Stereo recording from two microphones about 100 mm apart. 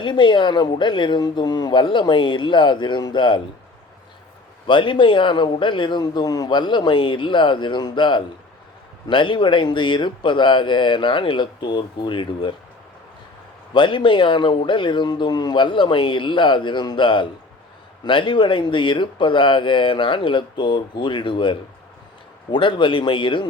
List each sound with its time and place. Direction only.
0.0 s a man's voice: 50° left (ahead or behind)
4.6 s a man's voice: 55° left (ahead or behind)
13.7 s speech: 55° left (ahead or behind)